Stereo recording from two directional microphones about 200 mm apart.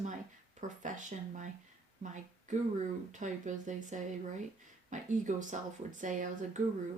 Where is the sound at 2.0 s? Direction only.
40° right (ahead or behind).